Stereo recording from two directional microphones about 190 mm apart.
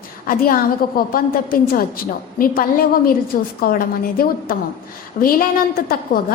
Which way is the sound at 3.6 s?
50° left (ahead or behind).